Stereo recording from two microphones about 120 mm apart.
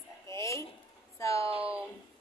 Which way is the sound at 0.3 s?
25° left (ahead or behind).